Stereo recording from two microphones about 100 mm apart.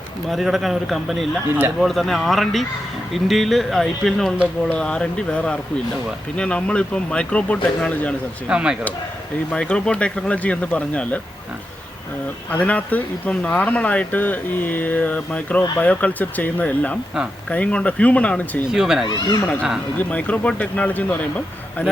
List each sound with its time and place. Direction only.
0.3 s speech: centre (ahead or behind)
8.4 s speech: 10° right (ahead or behind)
9.5 s speech: 10° left (ahead or behind)
12.5 s speech: 15° left (ahead or behind)
18.7 s speech: 5° right (ahead or behind)
19.0 s speech: 45° left (ahead or behind)
20.0 s speech: 15° left (ahead or behind)